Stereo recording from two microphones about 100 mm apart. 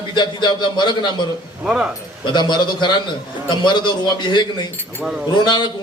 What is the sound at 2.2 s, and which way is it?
A man's voice, 50° left (ahead or behind).